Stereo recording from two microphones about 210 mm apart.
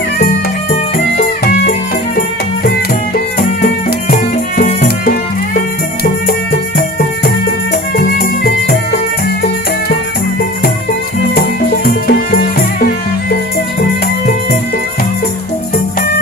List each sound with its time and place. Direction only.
0.9 s music: 45° left (ahead or behind)
4.1 s music: 40° left (ahead or behind)
7.9 s music: 45° left (ahead or behind)
11.8 s music: 45° left (ahead or behind)